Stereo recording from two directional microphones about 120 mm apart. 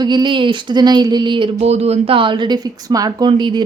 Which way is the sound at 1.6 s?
60° right (ahead or behind).